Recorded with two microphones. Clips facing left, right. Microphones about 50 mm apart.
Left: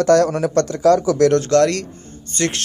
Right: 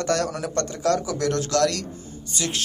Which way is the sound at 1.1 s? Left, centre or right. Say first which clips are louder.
Left 10 dB; left.